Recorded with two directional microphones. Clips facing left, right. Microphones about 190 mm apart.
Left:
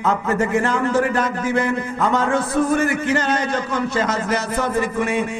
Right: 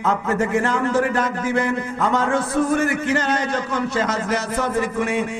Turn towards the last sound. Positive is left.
turn(degrees=15)  # may be behind; listen again after turning